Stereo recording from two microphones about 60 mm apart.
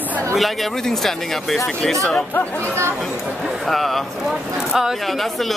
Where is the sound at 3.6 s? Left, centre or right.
Centre.